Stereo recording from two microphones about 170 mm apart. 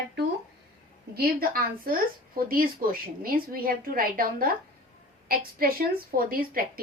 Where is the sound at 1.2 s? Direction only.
60° right (ahead or behind).